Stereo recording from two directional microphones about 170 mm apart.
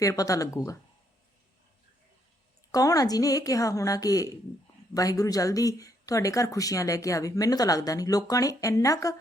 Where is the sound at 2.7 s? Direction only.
20° left (ahead or behind).